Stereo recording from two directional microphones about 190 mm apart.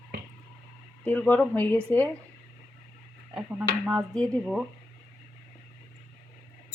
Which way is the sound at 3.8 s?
5° left (ahead or behind).